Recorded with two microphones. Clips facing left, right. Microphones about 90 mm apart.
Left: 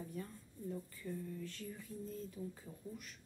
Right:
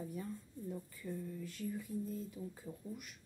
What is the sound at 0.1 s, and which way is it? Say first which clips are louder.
Speech: right 3 dB; 10° right (ahead or behind).